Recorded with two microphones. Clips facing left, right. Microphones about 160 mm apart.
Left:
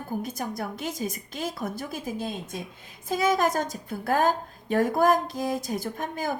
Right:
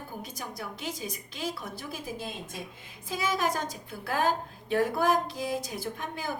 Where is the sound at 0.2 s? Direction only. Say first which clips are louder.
Left 7 dB; 50° left (ahead or behind).